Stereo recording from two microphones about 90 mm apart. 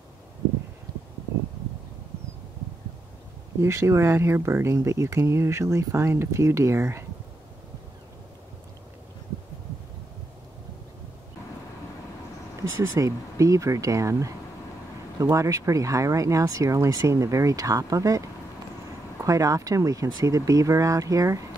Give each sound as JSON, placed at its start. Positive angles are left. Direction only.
{"t": 0.9, "sound": "a sound", "side_deg": -45}
{"t": 3.6, "sound": "speech", "side_deg": -30}
{"t": 12.7, "sound": "speech", "side_deg": -35}